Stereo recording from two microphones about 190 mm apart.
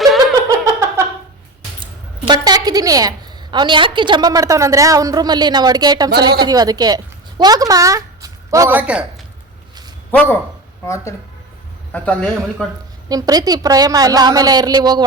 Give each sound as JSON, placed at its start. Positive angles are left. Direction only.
{"t": 0.0, "sound": "a sound", "side_deg": 0}
{"t": 0.4, "sound": "a sound", "side_deg": -15}
{"t": 1.8, "sound": "a woman's voice", "side_deg": -25}
{"t": 8.8, "sound": "speech", "side_deg": -5}
{"t": 10.1, "sound": "speech", "side_deg": 10}
{"t": 13.1, "sound": "a woman's voice", "side_deg": -20}